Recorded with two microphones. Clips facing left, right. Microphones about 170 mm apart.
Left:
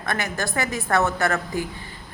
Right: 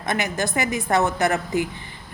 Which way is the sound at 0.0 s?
20° right (ahead or behind).